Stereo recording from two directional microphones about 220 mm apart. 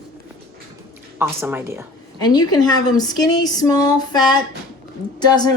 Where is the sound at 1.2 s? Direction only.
10° right (ahead or behind).